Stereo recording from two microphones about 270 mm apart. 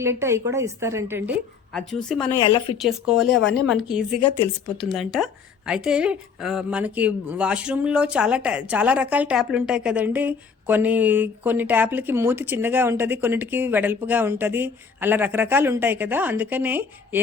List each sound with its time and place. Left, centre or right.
0.0 s a woman's voice: centre
1.7 s a woman's voice: centre
2.4 s speech: centre
2.7 s a woman's voice: centre